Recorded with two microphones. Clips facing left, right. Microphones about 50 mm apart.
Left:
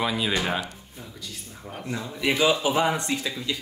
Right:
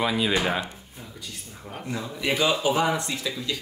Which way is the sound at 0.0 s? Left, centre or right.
Centre.